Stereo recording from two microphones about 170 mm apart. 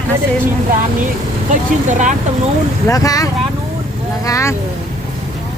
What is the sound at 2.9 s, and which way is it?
Speech, 20° left (ahead or behind).